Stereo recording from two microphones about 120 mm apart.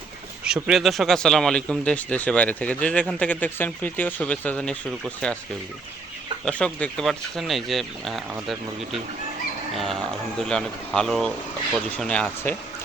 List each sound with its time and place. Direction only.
0.4 s speech: 5° right (ahead or behind)
6.4 s speech: 10° left (ahead or behind)